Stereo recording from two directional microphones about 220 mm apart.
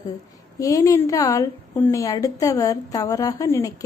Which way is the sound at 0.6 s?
15° left (ahead or behind).